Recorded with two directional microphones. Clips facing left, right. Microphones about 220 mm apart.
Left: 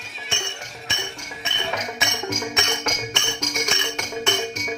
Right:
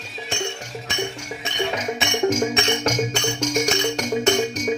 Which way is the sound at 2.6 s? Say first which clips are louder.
Right 6 dB; 30° right (ahead or behind).